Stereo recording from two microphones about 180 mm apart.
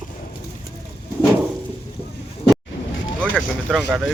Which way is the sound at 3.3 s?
5° right (ahead or behind).